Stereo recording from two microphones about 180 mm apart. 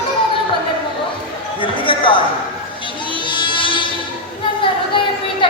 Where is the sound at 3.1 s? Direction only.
25° left (ahead or behind).